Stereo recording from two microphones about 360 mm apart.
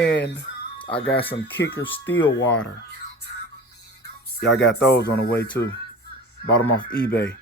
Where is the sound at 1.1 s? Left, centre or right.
Centre.